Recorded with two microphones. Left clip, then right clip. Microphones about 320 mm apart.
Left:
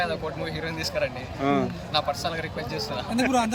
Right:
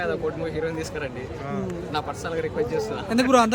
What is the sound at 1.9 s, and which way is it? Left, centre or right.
Speech, centre.